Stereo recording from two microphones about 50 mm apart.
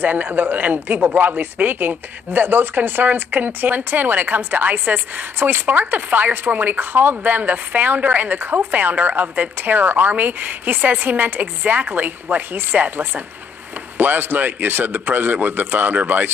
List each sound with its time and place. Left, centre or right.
0.0 s speech: right